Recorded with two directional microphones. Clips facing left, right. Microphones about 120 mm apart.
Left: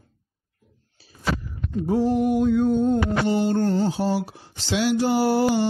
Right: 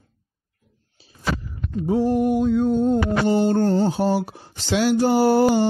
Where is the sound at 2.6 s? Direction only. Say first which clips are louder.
Right 1 dB; 5° right (ahead or behind).